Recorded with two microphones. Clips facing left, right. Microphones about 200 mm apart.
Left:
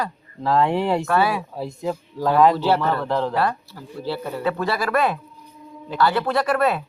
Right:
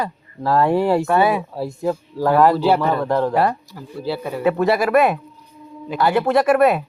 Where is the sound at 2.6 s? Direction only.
15° right (ahead or behind).